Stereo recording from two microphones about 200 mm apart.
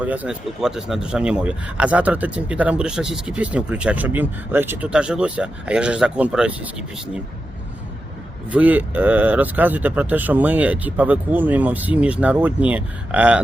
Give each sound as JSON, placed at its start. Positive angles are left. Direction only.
{"t": 0.0, "sound": "speech", "side_deg": -5}
{"t": 8.4, "sound": "speech", "side_deg": -5}